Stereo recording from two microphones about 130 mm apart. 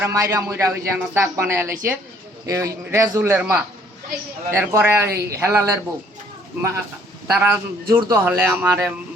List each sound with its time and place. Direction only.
0.0 s a man's voice: 25° right (ahead or behind)
4.5 s a man's voice: 20° right (ahead or behind)